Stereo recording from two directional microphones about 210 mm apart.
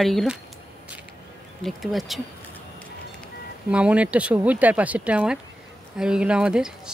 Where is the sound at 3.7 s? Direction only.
5° right (ahead or behind).